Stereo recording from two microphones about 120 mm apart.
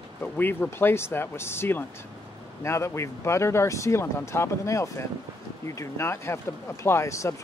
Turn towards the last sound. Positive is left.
turn(degrees=25)  # may be behind; listen again after turning